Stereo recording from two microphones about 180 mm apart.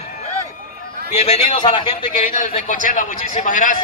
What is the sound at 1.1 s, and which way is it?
Speech, 40° left (ahead or behind).